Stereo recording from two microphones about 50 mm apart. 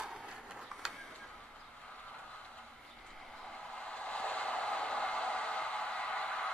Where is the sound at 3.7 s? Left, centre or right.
Left.